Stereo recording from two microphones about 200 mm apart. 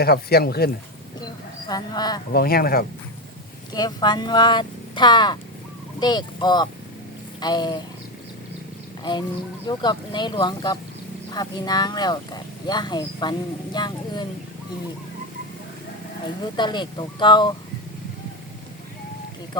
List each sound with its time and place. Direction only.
0.0 s speech: 50° left (ahead or behind)
1.2 s speech: 20° left (ahead or behind)
2.3 s speech: 50° left (ahead or behind)
3.7 s speech: 20° left (ahead or behind)
9.6 s speech: 20° left (ahead or behind)
16.6 s speech: 20° left (ahead or behind)